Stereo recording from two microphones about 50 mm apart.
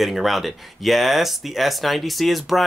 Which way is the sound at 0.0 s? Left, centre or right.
Centre.